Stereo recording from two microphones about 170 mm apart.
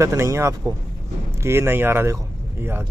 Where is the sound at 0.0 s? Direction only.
15° right (ahead or behind).